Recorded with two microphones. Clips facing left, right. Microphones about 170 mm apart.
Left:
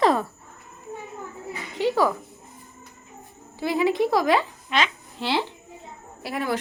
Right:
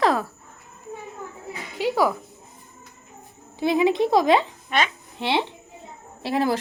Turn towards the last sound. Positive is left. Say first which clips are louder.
# right 5 dB
turn(degrees=-30)  # may be behind; listen again after turning